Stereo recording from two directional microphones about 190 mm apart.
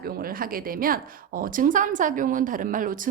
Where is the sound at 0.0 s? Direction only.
50° right (ahead or behind).